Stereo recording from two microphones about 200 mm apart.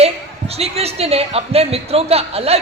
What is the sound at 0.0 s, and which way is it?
A woman's voice, 30° right (ahead or behind).